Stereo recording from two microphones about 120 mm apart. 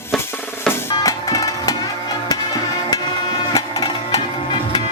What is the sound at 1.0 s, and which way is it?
Music, 30° left (ahead or behind).